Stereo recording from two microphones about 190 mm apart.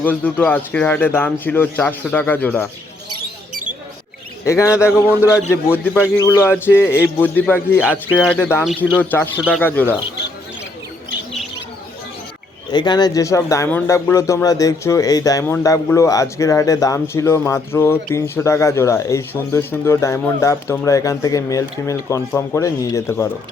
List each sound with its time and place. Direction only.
0.0 s speech: 10° left (ahead or behind)
4.4 s speech: 15° left (ahead or behind)
8.6 s speech: 5° right (ahead or behind)
9.0 s speech: 10° left (ahead or behind)
12.7 s speech: 20° left (ahead or behind)